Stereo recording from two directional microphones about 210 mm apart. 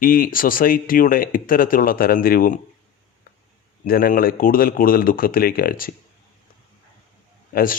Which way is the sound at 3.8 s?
40° left (ahead or behind).